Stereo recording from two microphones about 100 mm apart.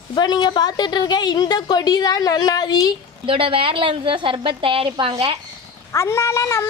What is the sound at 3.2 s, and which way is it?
A woman's voice, 65° right (ahead or behind).